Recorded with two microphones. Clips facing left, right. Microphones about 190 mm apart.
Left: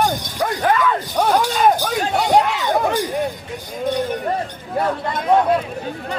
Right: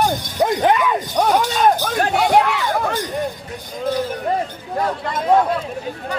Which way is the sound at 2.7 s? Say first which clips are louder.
Left 3 dB; 15° left (ahead or behind).